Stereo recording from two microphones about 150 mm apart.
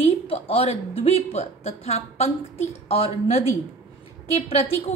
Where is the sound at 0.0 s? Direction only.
40° left (ahead or behind).